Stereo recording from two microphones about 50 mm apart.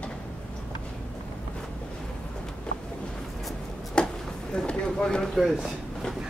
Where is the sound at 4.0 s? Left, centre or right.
Centre.